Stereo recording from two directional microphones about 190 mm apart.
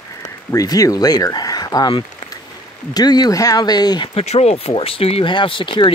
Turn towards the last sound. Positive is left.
turn(degrees=25)  # may be behind; listen again after turning